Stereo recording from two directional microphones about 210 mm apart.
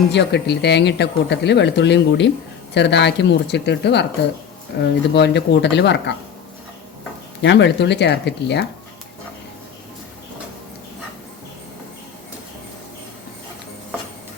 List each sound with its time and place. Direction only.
0.1 s speech: 55° left (ahead or behind)
7.4 s speech: 55° left (ahead or behind)